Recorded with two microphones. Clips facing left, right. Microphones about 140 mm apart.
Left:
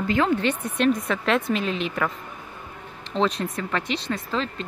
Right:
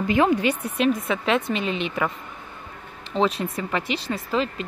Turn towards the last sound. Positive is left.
turn(degrees=-5)  # may be behind; listen again after turning